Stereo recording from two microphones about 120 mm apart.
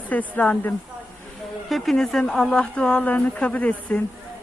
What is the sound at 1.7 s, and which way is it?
Speech, centre (ahead or behind).